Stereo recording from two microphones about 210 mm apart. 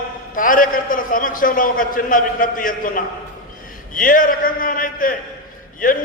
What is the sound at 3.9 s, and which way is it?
A man's voice, 40° left (ahead or behind).